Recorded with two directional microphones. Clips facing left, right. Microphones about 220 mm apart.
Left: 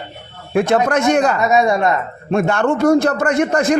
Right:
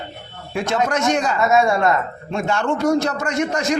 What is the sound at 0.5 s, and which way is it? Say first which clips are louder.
Speech: left 6 dB; 55° left (ahead or behind).